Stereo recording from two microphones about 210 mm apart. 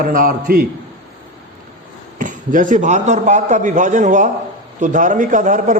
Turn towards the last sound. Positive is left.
turn(degrees=-35)  # may be behind; listen again after turning